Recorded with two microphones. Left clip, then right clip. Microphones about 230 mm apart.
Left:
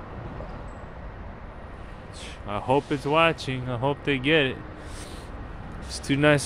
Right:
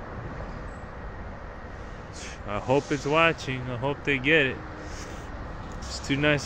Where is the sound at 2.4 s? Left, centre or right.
Centre.